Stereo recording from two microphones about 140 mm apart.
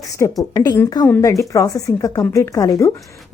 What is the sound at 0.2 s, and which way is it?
A woman's voice, 20° left (ahead or behind).